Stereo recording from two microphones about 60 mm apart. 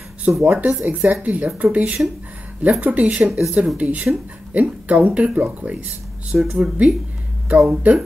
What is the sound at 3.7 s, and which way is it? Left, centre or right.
Speech, right.